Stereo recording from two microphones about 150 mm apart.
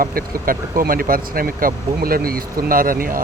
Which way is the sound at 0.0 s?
75° right (ahead or behind).